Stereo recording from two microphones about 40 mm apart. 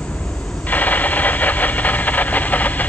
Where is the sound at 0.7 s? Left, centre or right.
Left.